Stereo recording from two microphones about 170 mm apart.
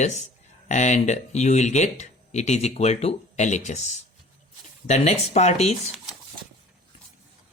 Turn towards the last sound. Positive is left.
turn(degrees=40)  # may be behind; listen again after turning